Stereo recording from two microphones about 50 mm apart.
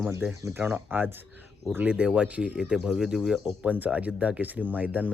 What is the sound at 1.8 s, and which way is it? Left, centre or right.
Speech, right.